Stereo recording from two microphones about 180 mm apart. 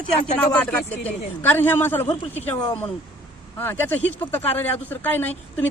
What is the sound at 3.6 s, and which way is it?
Speech, 10° left (ahead or behind).